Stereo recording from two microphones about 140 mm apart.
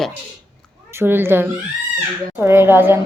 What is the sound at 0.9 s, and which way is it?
Speech, 15° right (ahead or behind).